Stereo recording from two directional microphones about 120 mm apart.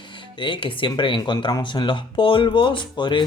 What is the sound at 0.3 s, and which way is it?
A man's voice, 45° left (ahead or behind).